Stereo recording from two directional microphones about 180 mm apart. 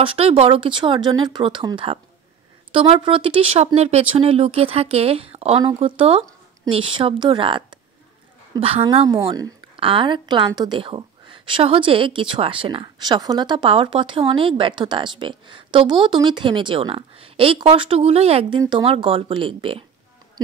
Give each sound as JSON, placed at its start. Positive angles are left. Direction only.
{"t": 0.0, "sound": "a woman's voice", "side_deg": -30}